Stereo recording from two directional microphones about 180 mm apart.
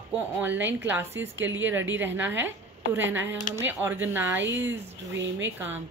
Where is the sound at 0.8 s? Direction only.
10° right (ahead or behind).